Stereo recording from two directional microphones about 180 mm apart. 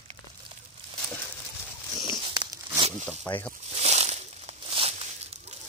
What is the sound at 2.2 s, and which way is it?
Tearing, 25° right (ahead or behind).